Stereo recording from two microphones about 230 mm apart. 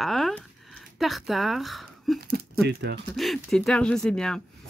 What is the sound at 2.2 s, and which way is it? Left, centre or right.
Speech, right.